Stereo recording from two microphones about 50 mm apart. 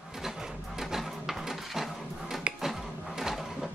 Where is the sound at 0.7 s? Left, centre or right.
Centre.